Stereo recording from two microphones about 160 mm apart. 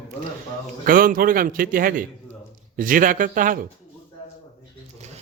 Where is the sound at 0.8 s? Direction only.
60° right (ahead or behind).